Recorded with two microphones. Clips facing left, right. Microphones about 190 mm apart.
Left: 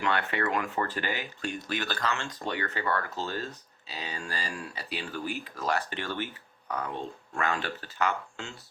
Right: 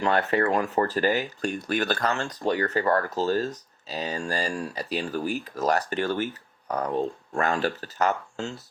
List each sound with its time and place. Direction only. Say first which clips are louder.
0.0 s speech: right 6 dB; 40° right (ahead or behind)